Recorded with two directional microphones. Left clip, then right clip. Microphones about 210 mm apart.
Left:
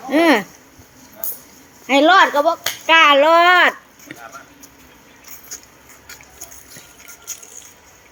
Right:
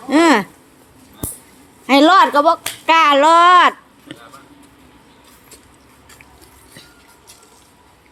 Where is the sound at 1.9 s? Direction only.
25° right (ahead or behind).